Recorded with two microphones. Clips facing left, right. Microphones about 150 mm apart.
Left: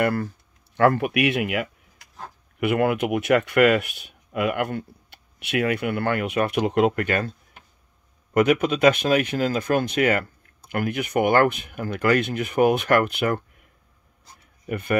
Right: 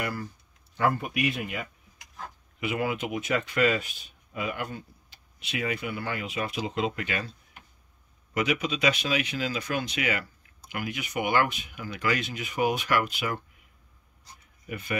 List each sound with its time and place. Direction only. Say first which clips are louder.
0.0 s speech: left 10 dB; 60° left (ahead or behind); by 1.7 s 75° left (ahead or behind)
2.6 s speech: left 8 dB; 60° left (ahead or behind)
14.7 s speech: left 9 dB; 55° left (ahead or behind)